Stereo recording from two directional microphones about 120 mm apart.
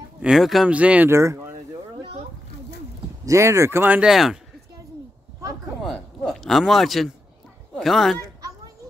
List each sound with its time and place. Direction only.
0.2 s speech: 5° right (ahead or behind)
1.1 s speech: 20° right (ahead or behind)
3.3 s speech: 25° right (ahead or behind)
4.1 s speech: centre (ahead or behind)
6.2 s speech: centre (ahead or behind)
8.2 s children playing: 30° right (ahead or behind)